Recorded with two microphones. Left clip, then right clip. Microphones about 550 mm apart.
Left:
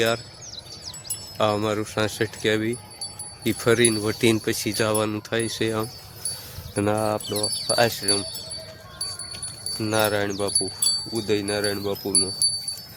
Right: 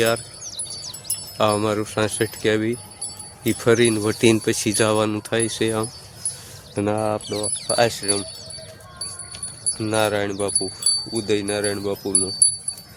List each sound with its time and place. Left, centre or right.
0.4 s music: centre
1.4 s speech: left
9.7 s speech: left